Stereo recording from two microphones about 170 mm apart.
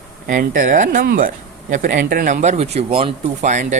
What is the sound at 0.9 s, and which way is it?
Speech, 60° right (ahead or behind).